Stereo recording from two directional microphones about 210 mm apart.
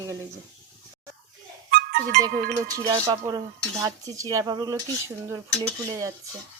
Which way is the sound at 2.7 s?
15° right (ahead or behind).